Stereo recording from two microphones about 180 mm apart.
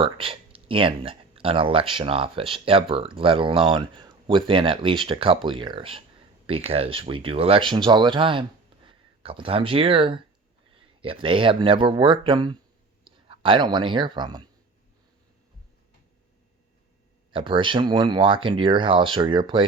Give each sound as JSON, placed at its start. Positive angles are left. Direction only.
{"t": 0.0, "sound": "speech", "side_deg": -30}
{"t": 17.3, "sound": "speech", "side_deg": -25}